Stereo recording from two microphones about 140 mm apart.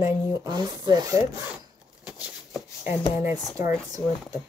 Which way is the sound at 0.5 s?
30° right (ahead or behind).